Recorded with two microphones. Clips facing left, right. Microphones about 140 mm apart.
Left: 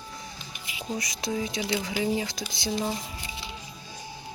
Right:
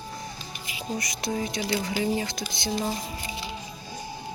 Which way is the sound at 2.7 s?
25° left (ahead or behind).